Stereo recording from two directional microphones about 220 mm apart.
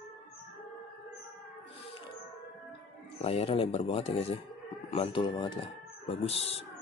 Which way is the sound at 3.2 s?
25° left (ahead or behind).